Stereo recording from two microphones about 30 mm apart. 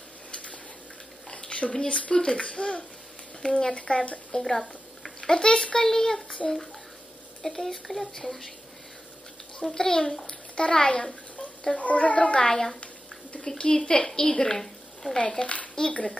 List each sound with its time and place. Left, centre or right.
0.3 s a sound: left
1.4 s a sound: left
1.9 s speech: left
4.4 s speech: centre
5.2 s a woman's voice: left
6.2 s speech: left
7.4 s speech: centre
9.7 s a woman's voice: centre
11.7 s a child's voice: left
12.4 s a woman's voice: centre
13.7 s a woman's voice: left
15.1 s speech: left